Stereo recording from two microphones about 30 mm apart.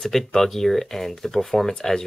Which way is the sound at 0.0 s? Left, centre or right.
Centre.